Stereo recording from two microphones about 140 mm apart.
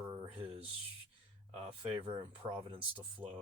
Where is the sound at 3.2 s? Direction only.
15° right (ahead or behind).